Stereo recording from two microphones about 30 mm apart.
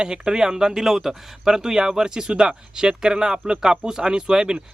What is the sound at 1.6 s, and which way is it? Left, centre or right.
Speech, right.